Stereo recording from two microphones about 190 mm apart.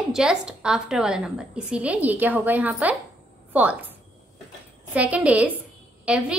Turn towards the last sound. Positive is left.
turn(degrees=-5)  # may be behind; listen again after turning